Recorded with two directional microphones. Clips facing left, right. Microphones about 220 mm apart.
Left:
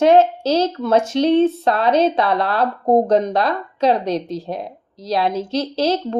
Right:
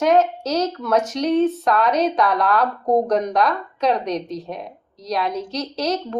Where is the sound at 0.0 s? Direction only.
30° left (ahead or behind).